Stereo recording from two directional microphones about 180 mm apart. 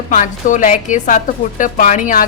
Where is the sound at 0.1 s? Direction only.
45° left (ahead or behind).